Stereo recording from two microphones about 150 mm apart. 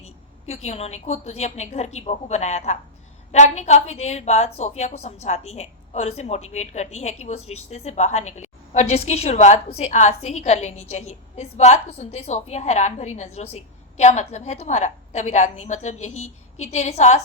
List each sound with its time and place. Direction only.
0.0 s a woman's voice: 45° left (ahead or behind)